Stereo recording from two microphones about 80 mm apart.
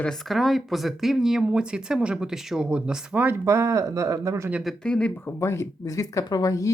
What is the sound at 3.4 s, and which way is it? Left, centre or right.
Speech, right.